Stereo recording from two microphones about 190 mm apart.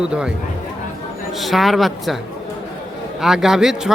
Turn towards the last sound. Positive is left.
turn(degrees=-5)  # may be behind; listen again after turning